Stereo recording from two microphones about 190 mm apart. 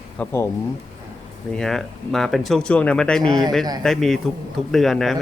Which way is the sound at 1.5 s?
Centre (ahead or behind).